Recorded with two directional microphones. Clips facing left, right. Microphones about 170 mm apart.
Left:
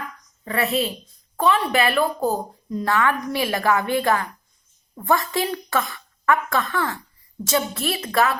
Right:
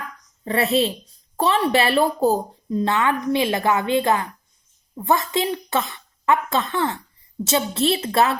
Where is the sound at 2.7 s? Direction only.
25° right (ahead or behind).